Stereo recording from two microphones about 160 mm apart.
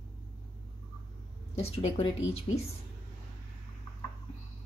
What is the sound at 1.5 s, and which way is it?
Speech, 40° left (ahead or behind).